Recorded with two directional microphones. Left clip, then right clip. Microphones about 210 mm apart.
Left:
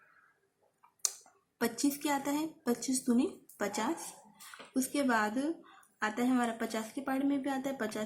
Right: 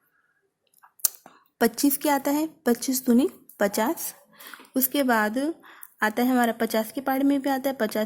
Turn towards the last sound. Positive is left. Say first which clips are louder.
# right 11 dB
turn(degrees=-45)  # may be behind; listen again after turning